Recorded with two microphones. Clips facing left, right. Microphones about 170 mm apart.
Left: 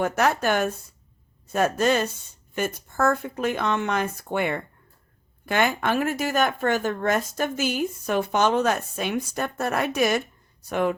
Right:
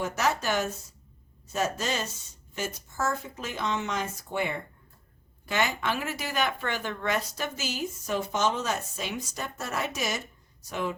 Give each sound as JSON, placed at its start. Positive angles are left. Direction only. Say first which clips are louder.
{"t": 0.0, "sound": "speech", "louder": "left 6 dB", "side_deg": 60}